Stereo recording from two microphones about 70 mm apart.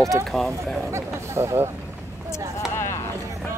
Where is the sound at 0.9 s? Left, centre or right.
Right.